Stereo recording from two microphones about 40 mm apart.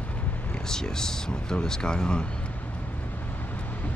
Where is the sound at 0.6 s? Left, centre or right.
Centre.